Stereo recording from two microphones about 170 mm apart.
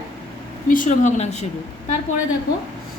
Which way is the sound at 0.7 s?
50° left (ahead or behind).